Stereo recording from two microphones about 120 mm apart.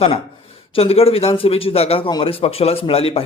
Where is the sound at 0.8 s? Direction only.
55° left (ahead or behind).